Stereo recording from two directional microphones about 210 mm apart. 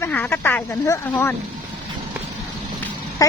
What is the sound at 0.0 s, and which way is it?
Speech, 10° left (ahead or behind).